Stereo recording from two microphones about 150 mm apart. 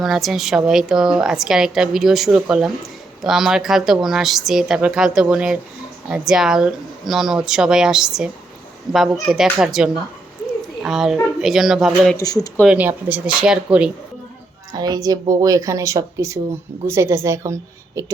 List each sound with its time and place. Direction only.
0.0 s a woman's voice: centre (ahead or behind)
8.9 s a woman's voice: 30° right (ahead or behind)
9.2 s a woman's voice: 5° right (ahead or behind)
12.1 s speech: 25° left (ahead or behind)
12.6 s speech: 10° right (ahead or behind)
14.7 s a woman's voice: 25° right (ahead or behind)